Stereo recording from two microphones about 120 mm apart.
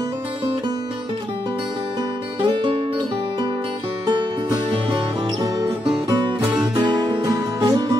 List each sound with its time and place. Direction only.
2.4 s music: 40° right (ahead or behind)
4.1 s music: 40° right (ahead or behind)
6.8 s music: 35° right (ahead or behind)